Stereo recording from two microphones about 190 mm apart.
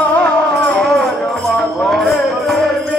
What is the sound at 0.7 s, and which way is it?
Music, 5° left (ahead or behind).